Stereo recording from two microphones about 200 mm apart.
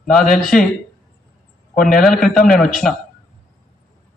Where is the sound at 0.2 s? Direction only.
45° left (ahead or behind).